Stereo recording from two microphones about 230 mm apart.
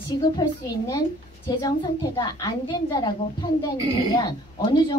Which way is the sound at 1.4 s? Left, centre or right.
Centre.